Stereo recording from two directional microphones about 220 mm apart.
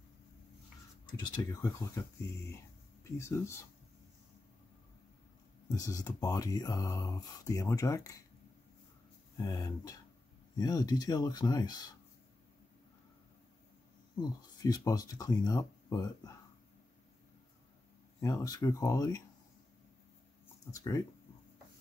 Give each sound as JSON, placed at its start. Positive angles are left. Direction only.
{"t": 1.2, "sound": "speech", "side_deg": 15}
{"t": 5.8, "sound": "speech", "side_deg": 15}
{"t": 9.4, "sound": "speech", "side_deg": 15}
{"t": 14.2, "sound": "speech", "side_deg": 15}
{"t": 18.2, "sound": "speech", "side_deg": 15}
{"t": 20.7, "sound": "speech", "side_deg": 15}